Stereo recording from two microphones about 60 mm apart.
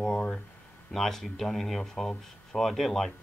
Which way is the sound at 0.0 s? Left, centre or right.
Centre.